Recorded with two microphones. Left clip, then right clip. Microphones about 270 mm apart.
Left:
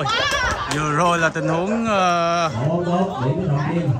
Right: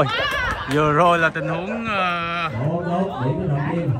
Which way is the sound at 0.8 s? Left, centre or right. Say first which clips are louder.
Right 3 dB; centre.